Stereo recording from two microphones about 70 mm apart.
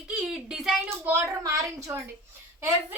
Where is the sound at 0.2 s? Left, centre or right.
Centre.